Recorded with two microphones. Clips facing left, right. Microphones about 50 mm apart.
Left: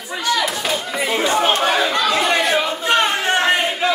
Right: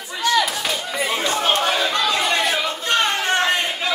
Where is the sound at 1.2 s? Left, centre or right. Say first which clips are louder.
Left 6 dB; centre.